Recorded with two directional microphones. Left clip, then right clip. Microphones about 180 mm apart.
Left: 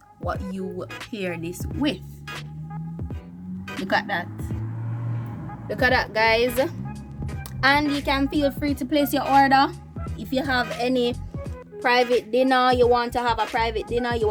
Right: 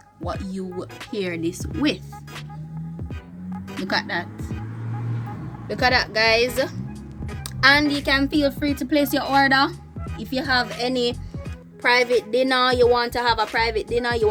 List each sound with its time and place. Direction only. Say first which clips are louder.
0.3 s speech: left 1 dB; 35° left (ahead or behind)
1.4 s a woman's voice: right 3 dB; 20° left (ahead or behind)
3.8 s speech: left 1 dB; 15° left (ahead or behind)
5.6 s a woman's voice: right 1 dB; 20° left (ahead or behind)
7.6 s a woman's voice: right 3 dB; 10° left (ahead or behind)